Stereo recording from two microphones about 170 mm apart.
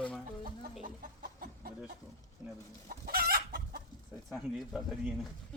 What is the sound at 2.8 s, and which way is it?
Chicken, 60° right (ahead or behind).